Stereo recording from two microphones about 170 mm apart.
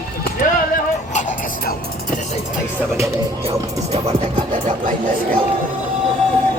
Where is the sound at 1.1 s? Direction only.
50° left (ahead or behind).